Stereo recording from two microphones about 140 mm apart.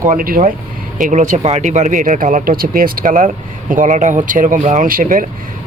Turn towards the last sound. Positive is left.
turn(degrees=-75)  # may be behind; listen again after turning